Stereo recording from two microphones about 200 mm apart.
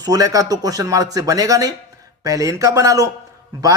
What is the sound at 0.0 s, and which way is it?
A man's voice, 20° right (ahead or behind).